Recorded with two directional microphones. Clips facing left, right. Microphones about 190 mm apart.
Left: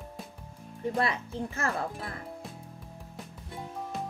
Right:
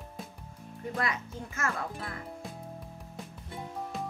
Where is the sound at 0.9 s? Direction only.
30° left (ahead or behind).